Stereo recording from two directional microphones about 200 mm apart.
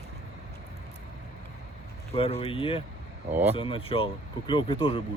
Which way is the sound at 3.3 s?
10° right (ahead or behind).